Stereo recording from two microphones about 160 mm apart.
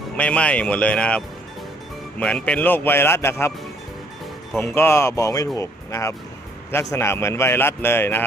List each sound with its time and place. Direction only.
0.2 s speech: 10° left (ahead or behind)
4.5 s speech: 15° left (ahead or behind)